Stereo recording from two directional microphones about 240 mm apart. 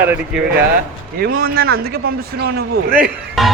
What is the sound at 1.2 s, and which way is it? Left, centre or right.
A woman's voice, right.